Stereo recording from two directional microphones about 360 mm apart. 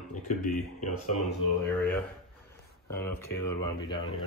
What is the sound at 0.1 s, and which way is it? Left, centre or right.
Speech, left.